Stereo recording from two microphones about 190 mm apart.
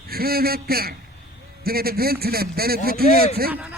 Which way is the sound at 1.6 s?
55° right (ahead or behind).